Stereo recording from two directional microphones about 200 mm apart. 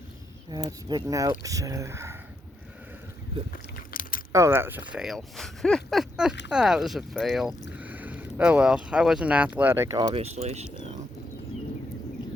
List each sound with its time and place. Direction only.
0.5 s speech: 20° right (ahead or behind)
3.5 s biting: 45° left (ahead or behind)
4.3 s speech: 15° right (ahead or behind)
10.2 s speech: 35° right (ahead or behind)